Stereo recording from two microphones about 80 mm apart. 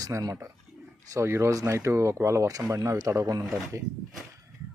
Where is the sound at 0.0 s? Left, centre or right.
Right.